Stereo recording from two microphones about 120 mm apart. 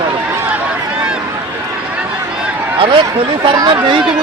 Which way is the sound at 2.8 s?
45° right (ahead or behind).